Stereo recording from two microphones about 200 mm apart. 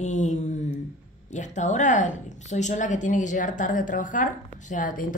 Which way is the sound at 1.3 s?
35° left (ahead or behind).